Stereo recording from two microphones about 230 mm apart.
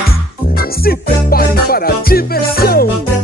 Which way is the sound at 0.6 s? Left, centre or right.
Left.